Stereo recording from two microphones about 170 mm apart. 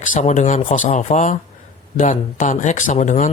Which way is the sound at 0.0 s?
45° left (ahead or behind).